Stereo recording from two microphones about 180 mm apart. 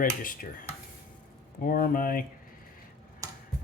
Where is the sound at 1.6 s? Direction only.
50° left (ahead or behind).